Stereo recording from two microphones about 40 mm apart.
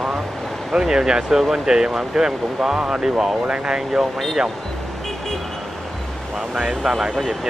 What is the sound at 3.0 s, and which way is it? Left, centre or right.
Speech, centre.